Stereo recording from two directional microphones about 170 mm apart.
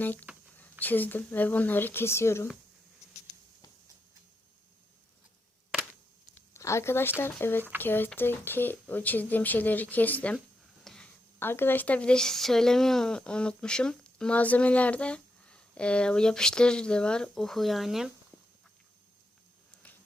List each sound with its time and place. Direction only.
0.0 s speech: 10° left (ahead or behind)
6.5 s speech: 15° left (ahead or behind); by 18.1 s centre (ahead or behind)